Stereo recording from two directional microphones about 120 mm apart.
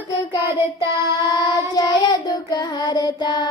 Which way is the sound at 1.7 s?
35° left (ahead or behind).